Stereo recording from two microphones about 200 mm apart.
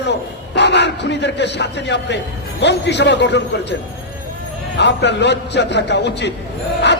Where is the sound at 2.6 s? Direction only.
60° left (ahead or behind).